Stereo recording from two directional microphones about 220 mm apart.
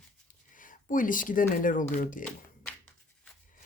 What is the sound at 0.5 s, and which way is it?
Speech, 35° left (ahead or behind).